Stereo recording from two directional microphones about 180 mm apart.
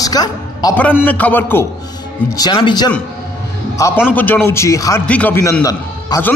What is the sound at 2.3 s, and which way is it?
Speech, 25° left (ahead or behind).